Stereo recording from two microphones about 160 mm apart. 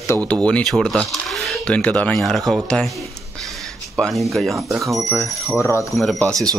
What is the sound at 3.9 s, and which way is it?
Speech, centre (ahead or behind).